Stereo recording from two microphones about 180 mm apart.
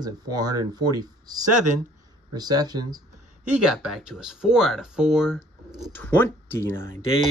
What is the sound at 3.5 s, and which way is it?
Speech, 5° right (ahead or behind).